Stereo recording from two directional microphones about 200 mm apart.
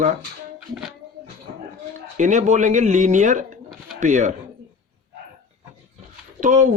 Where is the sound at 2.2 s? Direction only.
35° right (ahead or behind).